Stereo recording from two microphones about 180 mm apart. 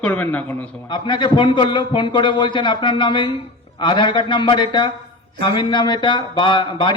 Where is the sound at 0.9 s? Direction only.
25° left (ahead or behind).